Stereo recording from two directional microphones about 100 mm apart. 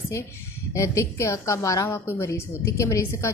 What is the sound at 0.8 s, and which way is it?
A woman's voice, 30° left (ahead or behind).